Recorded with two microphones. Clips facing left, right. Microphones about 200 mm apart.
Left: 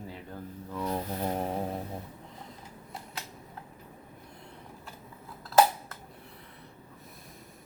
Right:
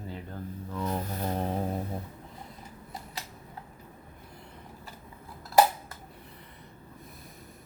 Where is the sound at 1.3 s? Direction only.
5° left (ahead or behind).